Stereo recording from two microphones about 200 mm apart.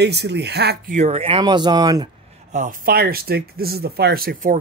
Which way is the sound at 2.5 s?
45° right (ahead or behind).